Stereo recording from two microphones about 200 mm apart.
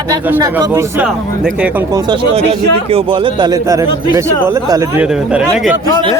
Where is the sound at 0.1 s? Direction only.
15° right (ahead or behind).